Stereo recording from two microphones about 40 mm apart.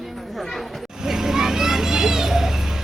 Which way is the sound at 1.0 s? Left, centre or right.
Centre.